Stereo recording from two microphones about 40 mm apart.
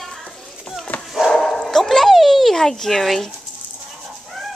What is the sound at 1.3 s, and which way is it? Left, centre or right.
Dog, centre.